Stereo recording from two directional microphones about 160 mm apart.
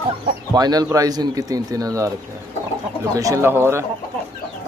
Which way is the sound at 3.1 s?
20° right (ahead or behind).